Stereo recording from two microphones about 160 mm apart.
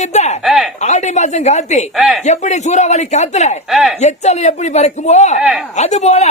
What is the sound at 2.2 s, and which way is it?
Speech, 45° left (ahead or behind).